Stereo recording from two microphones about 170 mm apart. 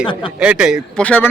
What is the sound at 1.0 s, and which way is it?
Speech, 10° left (ahead or behind).